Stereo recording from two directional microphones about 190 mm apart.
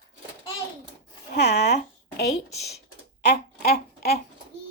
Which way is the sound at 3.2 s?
55° left (ahead or behind).